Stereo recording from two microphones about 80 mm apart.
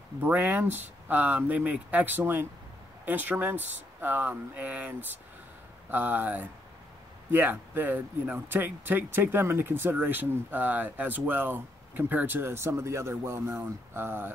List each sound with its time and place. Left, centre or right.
0.2 s speech: right